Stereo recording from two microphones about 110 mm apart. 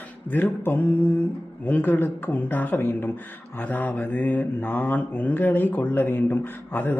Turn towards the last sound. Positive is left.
turn(degrees=20)  # may be behind; listen again after turning